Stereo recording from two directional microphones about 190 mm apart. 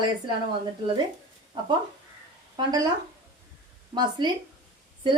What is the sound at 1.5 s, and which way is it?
Speech, 25° right (ahead or behind).